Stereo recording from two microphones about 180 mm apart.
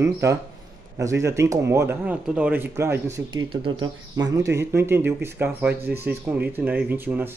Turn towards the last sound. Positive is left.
turn(degrees=-10)  # may be behind; listen again after turning